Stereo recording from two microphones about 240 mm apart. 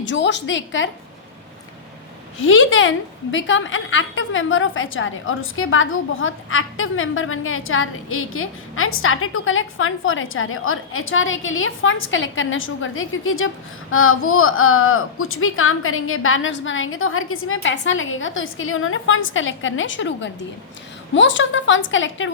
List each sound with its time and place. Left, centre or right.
0.0 s a woman's voice: left
2.4 s a woman's voice: left